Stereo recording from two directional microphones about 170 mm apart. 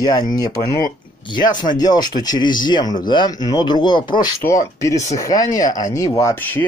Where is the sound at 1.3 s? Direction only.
25° left (ahead or behind).